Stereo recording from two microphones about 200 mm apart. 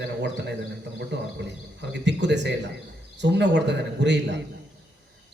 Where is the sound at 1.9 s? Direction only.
60° right (ahead or behind).